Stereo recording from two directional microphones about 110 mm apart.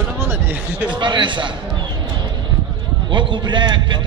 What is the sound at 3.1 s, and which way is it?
Speech, 45° right (ahead or behind).